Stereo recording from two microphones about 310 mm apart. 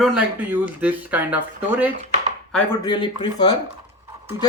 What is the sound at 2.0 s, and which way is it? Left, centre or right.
Speech, right.